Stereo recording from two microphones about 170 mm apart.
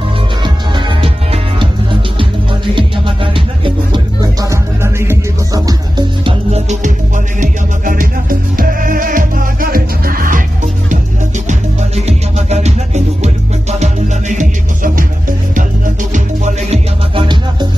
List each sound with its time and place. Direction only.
0.4 s music: 25° right (ahead or behind)
6.5 s music: 40° right (ahead or behind)
11.4 s music: 40° right (ahead or behind)
17.1 s music: 25° right (ahead or behind)